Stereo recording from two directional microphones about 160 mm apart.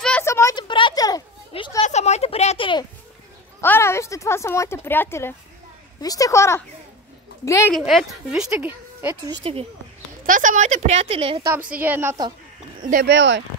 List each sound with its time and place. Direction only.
0.2 s a sound: 15° left (ahead or behind)
1.8 s a sound: 45° left (ahead or behind)
3.6 s a woman's voice: 15° left (ahead or behind)
7.7 s speech: centre (ahead or behind)
9.3 s speech: 35° right (ahead or behind)
10.2 s a woman's voice: 55° right (ahead or behind); by 11.4 s 35° right (ahead or behind)
11.8 s a woman's voice: 15° right (ahead or behind)
12.9 s speech: 90° right